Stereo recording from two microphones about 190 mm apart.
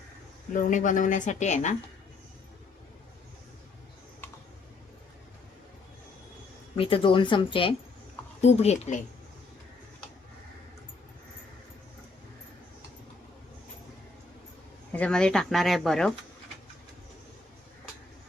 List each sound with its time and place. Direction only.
0.5 s a woman's voice: 40° left (ahead or behind)
6.7 s a woman's voice: 30° left (ahead or behind)
14.9 s speech: 5° left (ahead or behind)